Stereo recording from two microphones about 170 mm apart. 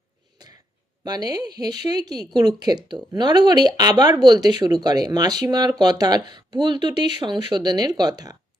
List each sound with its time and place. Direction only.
1.0 s speech: 25° right (ahead or behind)